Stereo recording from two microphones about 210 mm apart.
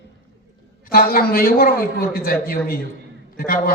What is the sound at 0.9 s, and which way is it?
A man's voice, 45° left (ahead or behind).